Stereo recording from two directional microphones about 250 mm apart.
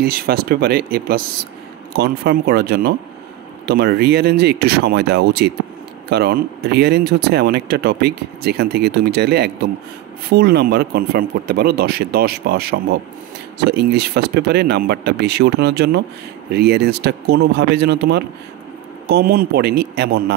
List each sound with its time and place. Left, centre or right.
0.0 s speech: right